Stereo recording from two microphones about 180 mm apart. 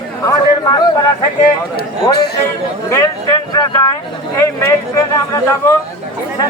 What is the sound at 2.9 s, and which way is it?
Speech, 20° left (ahead or behind).